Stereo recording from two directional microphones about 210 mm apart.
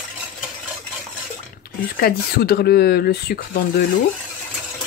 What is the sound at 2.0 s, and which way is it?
Speech, 45° left (ahead or behind).